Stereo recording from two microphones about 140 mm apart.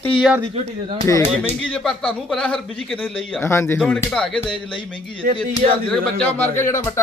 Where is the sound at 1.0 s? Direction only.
20° left (ahead or behind).